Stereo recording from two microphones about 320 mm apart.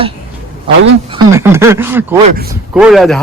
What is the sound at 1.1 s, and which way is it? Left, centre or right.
Speech, centre.